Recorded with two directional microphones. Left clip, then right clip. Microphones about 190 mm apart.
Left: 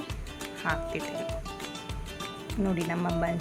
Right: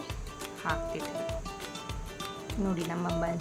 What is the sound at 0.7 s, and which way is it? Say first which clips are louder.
Speech: left 2 dB; 15° left (ahead or behind).